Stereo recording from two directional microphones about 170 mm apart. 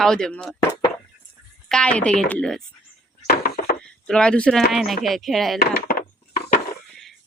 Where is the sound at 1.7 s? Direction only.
5° left (ahead or behind).